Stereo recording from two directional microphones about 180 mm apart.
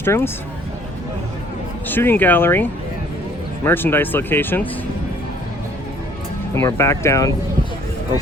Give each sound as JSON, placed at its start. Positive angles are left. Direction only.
{"t": 0.0, "sound": "speech", "side_deg": 10}
{"t": 1.9, "sound": "speech", "side_deg": 10}
{"t": 6.5, "sound": "speech", "side_deg": 15}